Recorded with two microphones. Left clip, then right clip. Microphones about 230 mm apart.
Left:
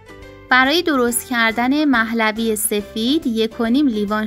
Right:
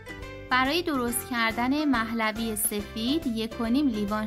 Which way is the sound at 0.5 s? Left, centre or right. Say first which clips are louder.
Left 10 dB; left.